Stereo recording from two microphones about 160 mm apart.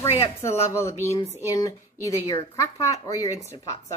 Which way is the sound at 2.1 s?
20° left (ahead or behind).